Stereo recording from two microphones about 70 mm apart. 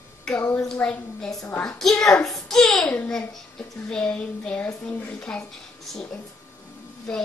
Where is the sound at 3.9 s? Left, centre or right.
Centre.